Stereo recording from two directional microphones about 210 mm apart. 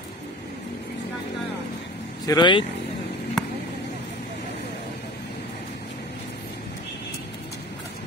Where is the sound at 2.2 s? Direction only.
20° left (ahead or behind).